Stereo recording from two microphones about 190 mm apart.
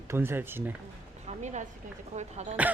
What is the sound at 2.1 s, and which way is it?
Speech, 35° right (ahead or behind).